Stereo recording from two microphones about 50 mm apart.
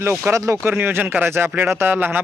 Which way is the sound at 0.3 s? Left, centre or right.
Right.